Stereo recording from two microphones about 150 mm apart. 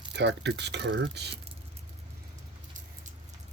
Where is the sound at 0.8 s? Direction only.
90° right.